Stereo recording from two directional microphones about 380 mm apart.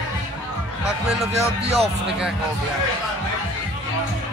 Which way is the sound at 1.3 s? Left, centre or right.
Centre.